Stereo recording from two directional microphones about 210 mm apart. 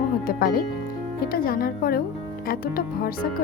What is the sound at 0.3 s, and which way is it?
Speech, 45° left (ahead or behind).